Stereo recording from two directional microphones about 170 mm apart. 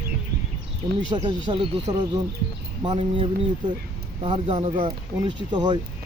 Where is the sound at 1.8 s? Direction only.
20° right (ahead or behind).